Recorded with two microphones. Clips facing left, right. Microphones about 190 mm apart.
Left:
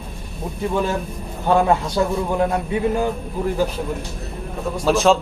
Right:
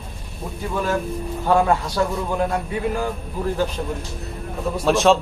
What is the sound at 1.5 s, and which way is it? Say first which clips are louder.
A man's voice: left 1 dB; 20° left (ahead or behind).